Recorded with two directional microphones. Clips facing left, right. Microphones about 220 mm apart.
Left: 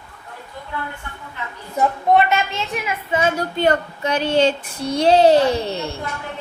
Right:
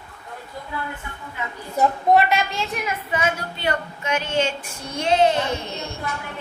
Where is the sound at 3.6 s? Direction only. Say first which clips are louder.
Left 9 dB; 40° left (ahead or behind).